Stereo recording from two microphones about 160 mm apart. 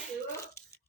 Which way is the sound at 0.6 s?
20° left (ahead or behind).